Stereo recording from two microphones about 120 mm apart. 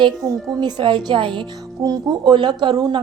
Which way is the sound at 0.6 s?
40° right (ahead or behind).